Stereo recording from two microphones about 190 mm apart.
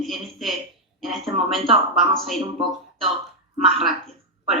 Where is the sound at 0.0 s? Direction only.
Centre (ahead or behind).